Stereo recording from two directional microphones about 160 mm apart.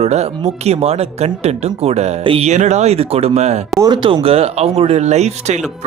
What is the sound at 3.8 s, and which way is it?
Speech, 30° right (ahead or behind).